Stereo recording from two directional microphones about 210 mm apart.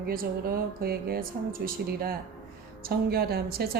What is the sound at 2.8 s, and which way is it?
Speech, 45° right (ahead or behind).